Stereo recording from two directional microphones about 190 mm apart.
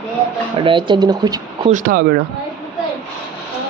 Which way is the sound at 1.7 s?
45° right (ahead or behind).